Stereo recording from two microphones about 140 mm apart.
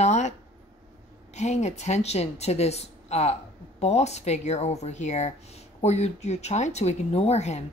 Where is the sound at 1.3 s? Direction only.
55° left (ahead or behind).